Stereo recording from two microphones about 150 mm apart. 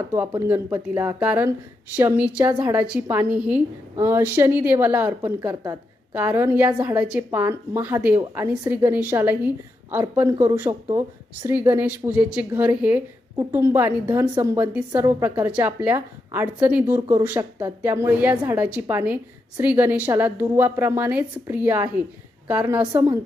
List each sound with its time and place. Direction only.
0.1 s a woman's voice: 15° right (ahead or behind)
5.4 s a woman's voice: 25° right (ahead or behind)